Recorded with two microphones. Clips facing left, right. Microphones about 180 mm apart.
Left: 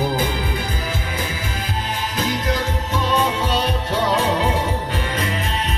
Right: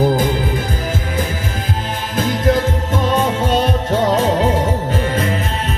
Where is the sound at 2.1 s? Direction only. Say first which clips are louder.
Right 8 dB; 50° right (ahead or behind).